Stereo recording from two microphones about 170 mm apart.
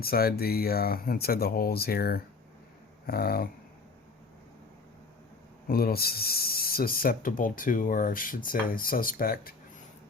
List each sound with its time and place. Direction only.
0.0 s speech: 60° left (ahead or behind)
5.6 s speech: 60° left (ahead or behind)